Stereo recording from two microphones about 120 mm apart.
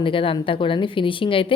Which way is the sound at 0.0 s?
45° left (ahead or behind).